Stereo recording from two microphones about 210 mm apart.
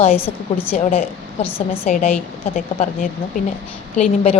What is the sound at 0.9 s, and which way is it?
Speech, 30° left (ahead or behind).